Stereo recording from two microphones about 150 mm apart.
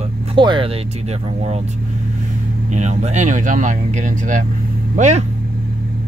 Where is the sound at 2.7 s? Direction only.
50° right (ahead or behind).